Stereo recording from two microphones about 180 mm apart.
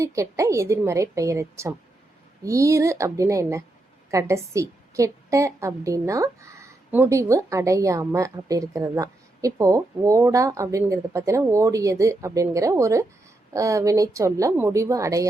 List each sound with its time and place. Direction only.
0.0 s a woman's voice: 15° right (ahead or behind)